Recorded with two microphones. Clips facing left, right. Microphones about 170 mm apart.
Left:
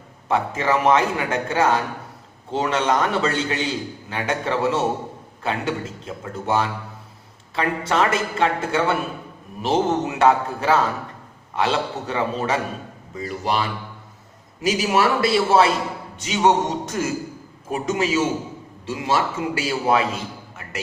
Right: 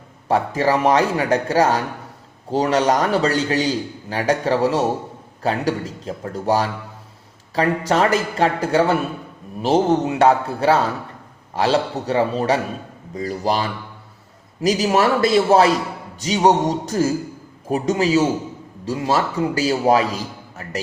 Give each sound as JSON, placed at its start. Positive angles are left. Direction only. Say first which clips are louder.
{"t": 0.3, "sound": "a man's voice", "louder": "right 3 dB", "side_deg": -35}